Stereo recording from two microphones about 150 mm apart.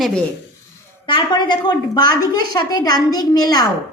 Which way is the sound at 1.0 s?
30° left (ahead or behind).